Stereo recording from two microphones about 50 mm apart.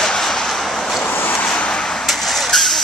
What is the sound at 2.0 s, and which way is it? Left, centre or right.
Vehicle, centre.